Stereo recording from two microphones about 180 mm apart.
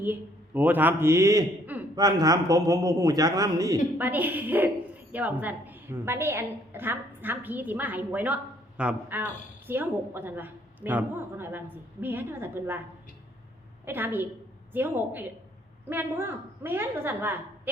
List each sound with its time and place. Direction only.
0.0 s a man's voice: 10° right (ahead or behind)
13.8 s a woman's voice: 10° right (ahead or behind)